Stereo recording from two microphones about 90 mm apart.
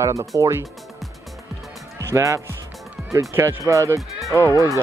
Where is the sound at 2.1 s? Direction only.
35° right (ahead or behind).